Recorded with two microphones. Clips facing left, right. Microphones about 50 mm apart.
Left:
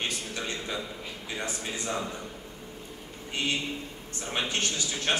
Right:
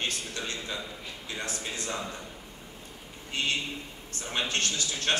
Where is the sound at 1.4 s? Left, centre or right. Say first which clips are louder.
Left 1 dB; centre.